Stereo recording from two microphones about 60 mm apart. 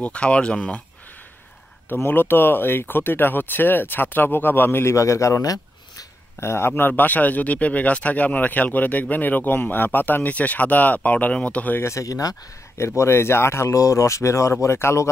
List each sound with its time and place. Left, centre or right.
0.0 s speech: centre
2.0 s speech: left
4.8 s speech: left
6.4 s speech: left
6.9 s speech: left
11.8 s speech: left
12.7 s speech: left
13.7 s speech: left